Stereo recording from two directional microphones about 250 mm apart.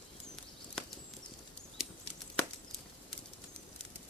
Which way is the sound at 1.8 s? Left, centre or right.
Centre.